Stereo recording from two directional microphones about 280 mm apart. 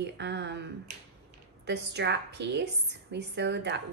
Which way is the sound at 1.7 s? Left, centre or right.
Right.